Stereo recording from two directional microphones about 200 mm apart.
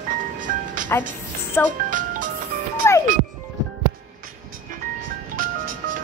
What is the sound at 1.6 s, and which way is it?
Speech, 10° left (ahead or behind).